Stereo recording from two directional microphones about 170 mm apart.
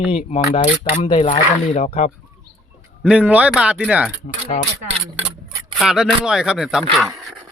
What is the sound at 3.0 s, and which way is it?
A man's voice, 5° right (ahead or behind).